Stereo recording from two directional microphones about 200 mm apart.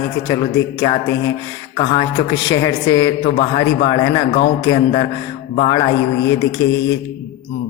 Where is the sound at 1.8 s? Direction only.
20° left (ahead or behind).